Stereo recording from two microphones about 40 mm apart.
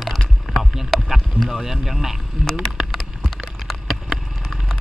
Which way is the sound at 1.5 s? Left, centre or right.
Centre.